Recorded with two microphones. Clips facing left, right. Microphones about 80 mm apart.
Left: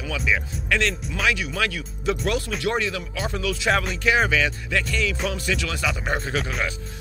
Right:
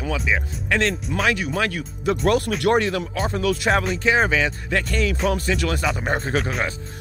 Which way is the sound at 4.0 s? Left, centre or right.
Right.